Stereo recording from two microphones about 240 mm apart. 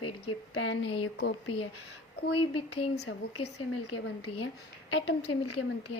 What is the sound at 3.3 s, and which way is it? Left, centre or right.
Speech, left.